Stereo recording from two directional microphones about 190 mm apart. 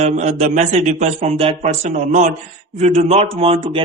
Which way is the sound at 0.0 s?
35° right (ahead or behind).